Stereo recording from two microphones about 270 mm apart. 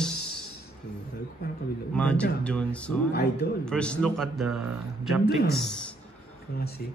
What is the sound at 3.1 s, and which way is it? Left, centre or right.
Speech, left.